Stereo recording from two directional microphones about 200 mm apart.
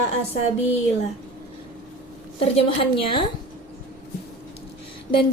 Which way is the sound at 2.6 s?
25° left (ahead or behind).